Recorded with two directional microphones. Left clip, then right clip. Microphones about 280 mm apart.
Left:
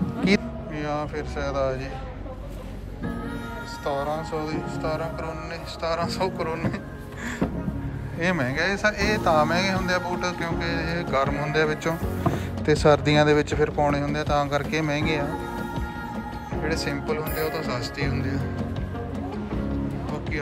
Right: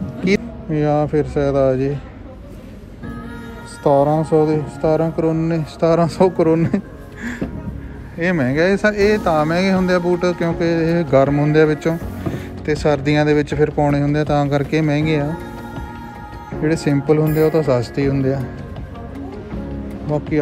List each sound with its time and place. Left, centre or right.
0.2 s music: centre
0.7 s speech: centre
3.8 s music: centre
8.2 s speech: centre
16.6 s music: centre